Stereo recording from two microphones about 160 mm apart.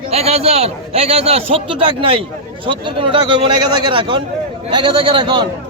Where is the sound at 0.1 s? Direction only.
40° right (ahead or behind).